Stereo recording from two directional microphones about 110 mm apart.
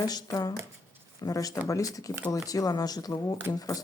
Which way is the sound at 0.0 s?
35° left (ahead or behind).